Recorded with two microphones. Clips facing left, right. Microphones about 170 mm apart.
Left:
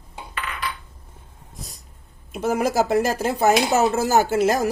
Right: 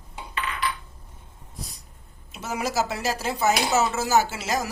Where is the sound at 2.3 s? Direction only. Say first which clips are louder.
Left 7 dB; 50° left (ahead or behind).